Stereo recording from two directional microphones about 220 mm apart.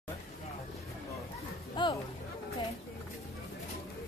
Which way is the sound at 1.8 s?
20° left (ahead or behind).